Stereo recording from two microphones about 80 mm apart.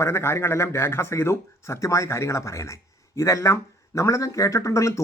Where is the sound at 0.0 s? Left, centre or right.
Left.